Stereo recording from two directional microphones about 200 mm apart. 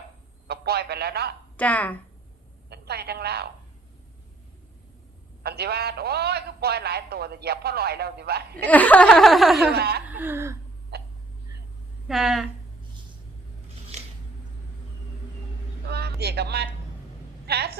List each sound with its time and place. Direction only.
0.4 s a man's voice: 50° right (ahead or behind)
1.5 s speech: 10° left (ahead or behind)
2.6 s a woman's voice: 55° right (ahead or behind)
5.4 s a man's voice: 55° right (ahead or behind)
8.5 s speech: 5° left (ahead or behind)
9.7 s a man's voice: 50° right (ahead or behind)
10.1 s speech: 10° right (ahead or behind)
10.9 s hiccup: 50° right (ahead or behind)
12.0 s speech: centre (ahead or behind)
13.9 s a sound: 35° right (ahead or behind)
15.9 s a sound: 55° right (ahead or behind)
17.4 s speech: 55° right (ahead or behind)